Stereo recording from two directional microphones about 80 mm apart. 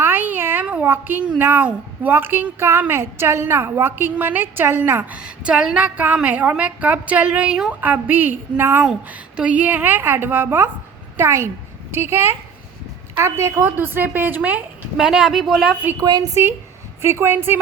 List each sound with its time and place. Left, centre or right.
0.0 s a sound: right
0.9 s a woman's voice: right
5.1 s a woman's voice: centre; by 8.8 s right
8.8 s a woman's voice: centre
14.9 s a woman's voice: centre
16.3 s a woman's voice: right